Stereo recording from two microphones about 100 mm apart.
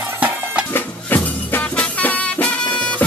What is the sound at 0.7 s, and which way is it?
Music, 20° left (ahead or behind).